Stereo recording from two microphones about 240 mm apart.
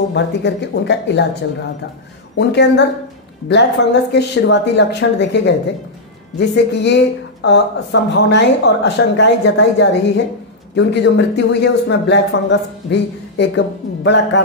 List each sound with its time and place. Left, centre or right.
0.1 s speech: left
2.3 s speech: left